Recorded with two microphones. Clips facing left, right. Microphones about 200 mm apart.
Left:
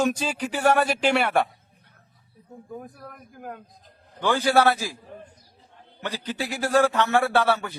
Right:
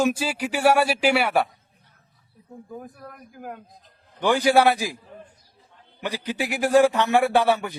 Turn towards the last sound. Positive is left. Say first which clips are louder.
# right 2 dB
turn(degrees=-15)  # may be behind; listen again after turning